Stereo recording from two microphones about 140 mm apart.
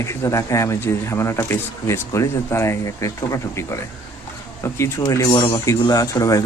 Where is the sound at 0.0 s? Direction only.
20° left (ahead or behind).